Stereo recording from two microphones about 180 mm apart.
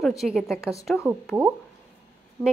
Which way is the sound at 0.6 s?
15° left (ahead or behind).